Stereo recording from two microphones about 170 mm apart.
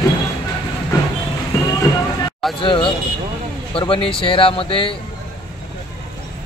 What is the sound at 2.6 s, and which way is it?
Speech, 30° left (ahead or behind).